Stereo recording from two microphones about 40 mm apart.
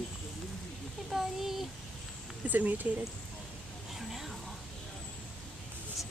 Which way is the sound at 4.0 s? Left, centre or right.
Centre.